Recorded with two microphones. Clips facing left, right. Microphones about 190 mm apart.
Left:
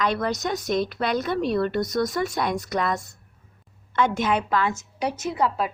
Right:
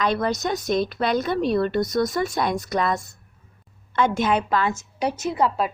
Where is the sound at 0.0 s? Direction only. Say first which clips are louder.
Right 2 dB; 25° right (ahead or behind).